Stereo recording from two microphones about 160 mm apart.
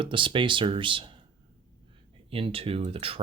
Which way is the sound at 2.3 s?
35° right (ahead or behind).